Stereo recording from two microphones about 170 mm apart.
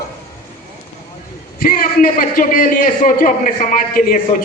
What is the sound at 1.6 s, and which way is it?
A man's voice, 55° left (ahead or behind).